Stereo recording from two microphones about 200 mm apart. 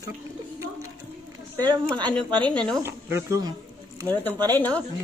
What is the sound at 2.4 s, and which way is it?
Speech, 5° left (ahead or behind).